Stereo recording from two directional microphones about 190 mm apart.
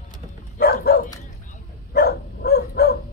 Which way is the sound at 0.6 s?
55° left (ahead or behind).